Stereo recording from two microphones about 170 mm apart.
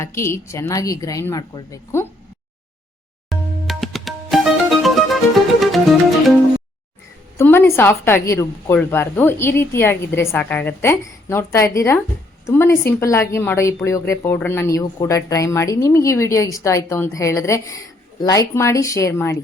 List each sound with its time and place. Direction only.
0.0 s a woman's voice: 15° left (ahead or behind)
3.2 s music: centre (ahead or behind)
7.3 s a woman's voice: 10° left (ahead or behind)